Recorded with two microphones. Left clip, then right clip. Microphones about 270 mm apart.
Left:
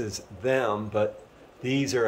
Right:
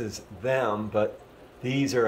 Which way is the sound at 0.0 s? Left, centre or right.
Centre.